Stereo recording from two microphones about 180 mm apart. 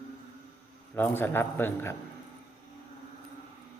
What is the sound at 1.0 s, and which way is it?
Speech, 10° left (ahead or behind).